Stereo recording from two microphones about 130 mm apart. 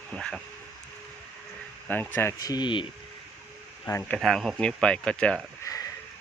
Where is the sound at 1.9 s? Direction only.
15° left (ahead or behind).